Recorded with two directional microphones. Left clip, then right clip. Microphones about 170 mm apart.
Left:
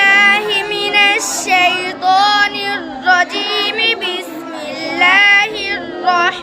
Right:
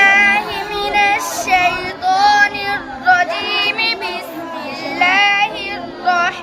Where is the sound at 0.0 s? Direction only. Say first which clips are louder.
Left 1 dB; 40° left (ahead or behind).